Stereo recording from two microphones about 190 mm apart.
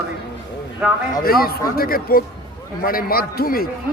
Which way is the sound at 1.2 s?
50° left (ahead or behind).